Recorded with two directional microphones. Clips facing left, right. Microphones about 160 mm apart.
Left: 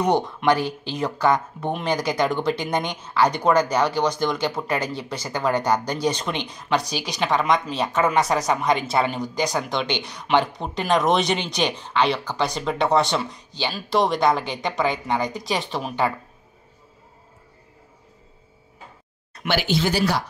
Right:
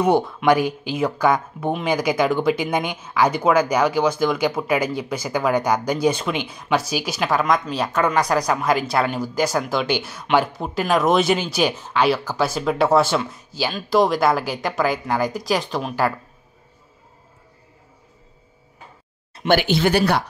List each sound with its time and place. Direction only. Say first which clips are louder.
0.4 s a woman's voice: right 3 dB; 10° right (ahead or behind)
19.4 s speech: right 5 dB; 55° right (ahead or behind)